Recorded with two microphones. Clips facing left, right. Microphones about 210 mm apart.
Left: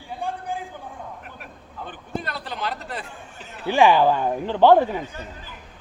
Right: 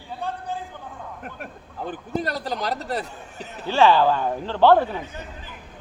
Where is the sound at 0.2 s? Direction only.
15° left (ahead or behind).